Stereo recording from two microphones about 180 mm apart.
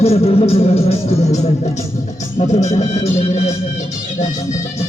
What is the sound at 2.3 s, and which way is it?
Speech, 40° left (ahead or behind).